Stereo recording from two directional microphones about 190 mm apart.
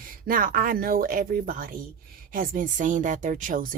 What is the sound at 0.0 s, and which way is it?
Speech, 45° right (ahead or behind).